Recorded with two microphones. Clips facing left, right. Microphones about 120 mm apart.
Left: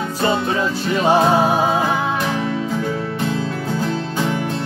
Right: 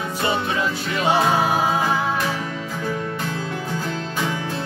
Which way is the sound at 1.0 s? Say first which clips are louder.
Left 4 dB; 25° left (ahead or behind).